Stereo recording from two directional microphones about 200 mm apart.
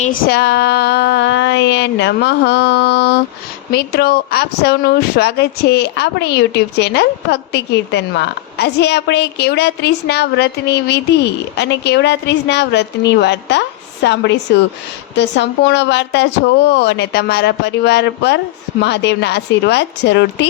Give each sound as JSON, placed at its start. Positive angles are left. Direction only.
{"t": 0.0, "sound": "speech", "side_deg": 45}